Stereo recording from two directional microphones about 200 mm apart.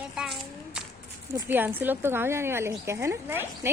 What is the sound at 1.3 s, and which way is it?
Speech, 10° right (ahead or behind).